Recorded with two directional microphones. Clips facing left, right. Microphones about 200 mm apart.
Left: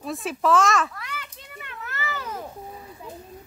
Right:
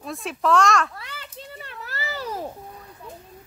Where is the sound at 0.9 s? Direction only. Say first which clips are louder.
Left 1 dB; 30° right (ahead or behind).